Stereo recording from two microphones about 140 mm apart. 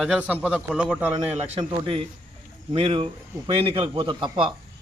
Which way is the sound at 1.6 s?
40° right (ahead or behind).